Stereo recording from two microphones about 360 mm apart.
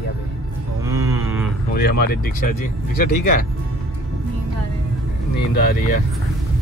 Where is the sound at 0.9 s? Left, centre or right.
Centre.